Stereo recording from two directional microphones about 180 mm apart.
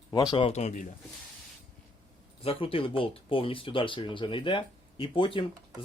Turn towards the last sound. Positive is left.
turn(degrees=30)  # may be behind; listen again after turning